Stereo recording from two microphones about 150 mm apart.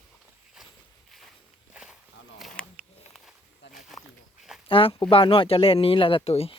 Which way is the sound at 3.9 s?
Centre (ahead or behind).